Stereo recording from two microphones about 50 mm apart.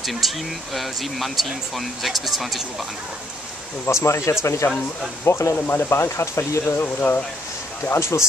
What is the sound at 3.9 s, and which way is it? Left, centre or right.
Speech, left.